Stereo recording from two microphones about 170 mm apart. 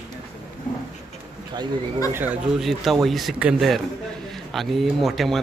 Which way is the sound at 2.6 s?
Centre (ahead or behind).